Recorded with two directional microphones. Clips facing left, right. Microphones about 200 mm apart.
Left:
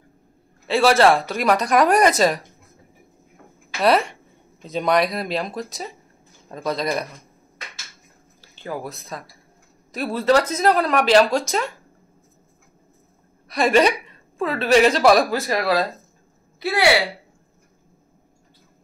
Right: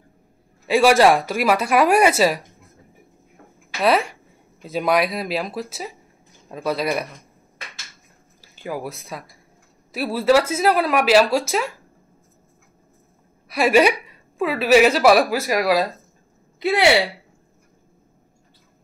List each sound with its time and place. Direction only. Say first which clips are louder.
0.7 s a woman's voice: right 1 dB; 10° right (ahead or behind)
3.8 s a woman's voice: left 1 dB; centre (ahead or behind)
8.4 s a woman's voice: right 1 dB; 10° right (ahead or behind)
13.5 s a woman's voice: right 1 dB; 5° right (ahead or behind)
16.5 s speech: right 2 dB; 20° right (ahead or behind)